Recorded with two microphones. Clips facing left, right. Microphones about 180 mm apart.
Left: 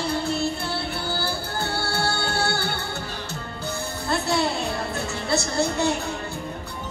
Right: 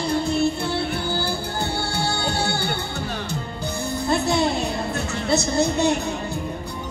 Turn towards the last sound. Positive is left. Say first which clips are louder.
# right 3 dB
turn(degrees=-20)  # may be behind; listen again after turning